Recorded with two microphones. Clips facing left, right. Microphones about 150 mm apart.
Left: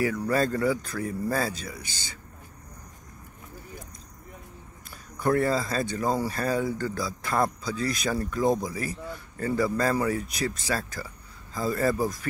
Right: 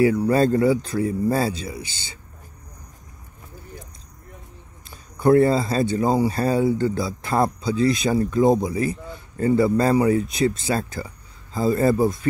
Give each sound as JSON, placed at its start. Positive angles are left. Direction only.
{"t": 0.0, "sound": "speech", "side_deg": -30}
{"t": 5.2, "sound": "speech", "side_deg": -30}